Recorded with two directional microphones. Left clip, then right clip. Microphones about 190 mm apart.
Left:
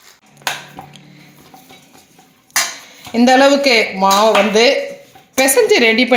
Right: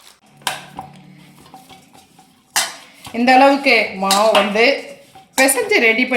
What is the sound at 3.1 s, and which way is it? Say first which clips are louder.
Speech: left 1 dB; 35° left (ahead or behind).